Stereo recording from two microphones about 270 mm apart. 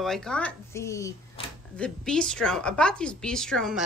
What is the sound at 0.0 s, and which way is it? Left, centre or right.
A woman's voice, centre.